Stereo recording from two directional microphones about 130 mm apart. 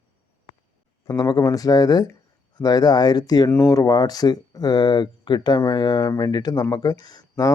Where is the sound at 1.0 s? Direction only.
30° left (ahead or behind).